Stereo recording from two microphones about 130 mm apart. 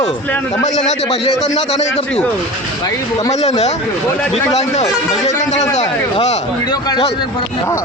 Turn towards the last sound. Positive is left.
turn(degrees=30)  # may be behind; listen again after turning